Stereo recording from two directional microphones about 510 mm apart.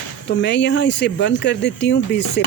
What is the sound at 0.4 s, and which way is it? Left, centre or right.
Speech, left.